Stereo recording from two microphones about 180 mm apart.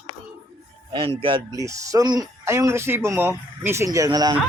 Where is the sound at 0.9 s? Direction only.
30° right (ahead or behind).